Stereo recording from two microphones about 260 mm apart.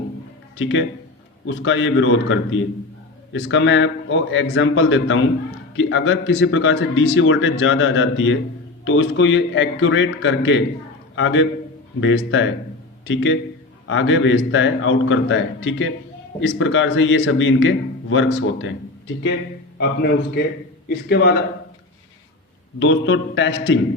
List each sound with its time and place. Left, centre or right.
0.5 s a man's voice: left
22.8 s a man's voice: left